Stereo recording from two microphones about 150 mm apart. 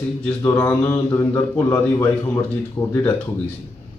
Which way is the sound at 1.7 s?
15° left (ahead or behind).